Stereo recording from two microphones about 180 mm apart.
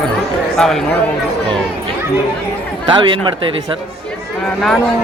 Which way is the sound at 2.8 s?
25° right (ahead or behind).